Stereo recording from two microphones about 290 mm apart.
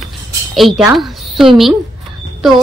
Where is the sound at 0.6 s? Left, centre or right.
Centre.